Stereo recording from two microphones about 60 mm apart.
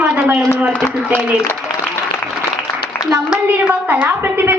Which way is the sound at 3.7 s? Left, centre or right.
Right.